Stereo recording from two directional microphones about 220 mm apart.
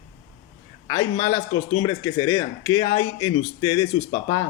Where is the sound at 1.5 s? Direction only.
75° left (ahead or behind).